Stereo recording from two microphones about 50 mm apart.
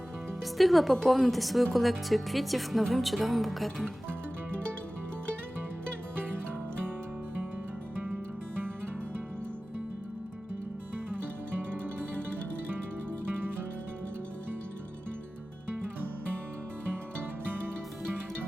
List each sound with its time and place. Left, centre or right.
0.5 s speech: centre
6.1 s music: right
10.9 s music: right